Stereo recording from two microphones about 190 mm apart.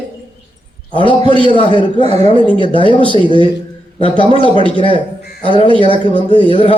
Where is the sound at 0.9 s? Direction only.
25° left (ahead or behind).